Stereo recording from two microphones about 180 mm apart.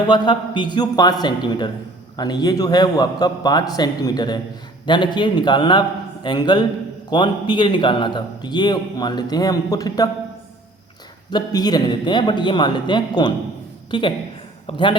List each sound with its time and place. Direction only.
0.3 s a man's voice: 25° left (ahead or behind)
11.3 s a man's voice: 25° left (ahead or behind)